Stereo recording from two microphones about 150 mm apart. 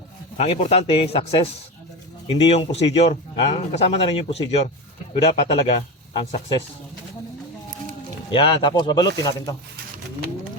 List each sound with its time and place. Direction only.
0.3 s speech: 45° left (ahead or behind)
8.3 s speech: 30° left (ahead or behind)